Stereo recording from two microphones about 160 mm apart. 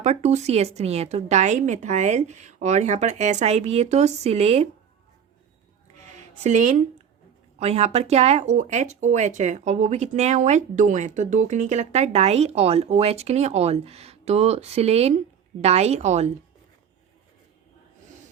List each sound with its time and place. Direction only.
0.0 s speech: 45° right (ahead or behind)
6.1 s speech: 45° right (ahead or behind)